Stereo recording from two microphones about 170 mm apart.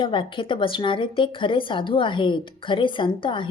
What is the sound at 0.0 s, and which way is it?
A woman's voice, 30° left (ahead or behind).